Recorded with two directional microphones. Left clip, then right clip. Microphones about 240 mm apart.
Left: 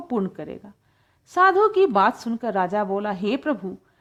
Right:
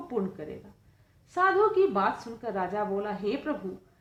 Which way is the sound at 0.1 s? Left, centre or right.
Left.